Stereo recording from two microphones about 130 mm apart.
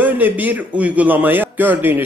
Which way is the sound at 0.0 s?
15° right (ahead or behind).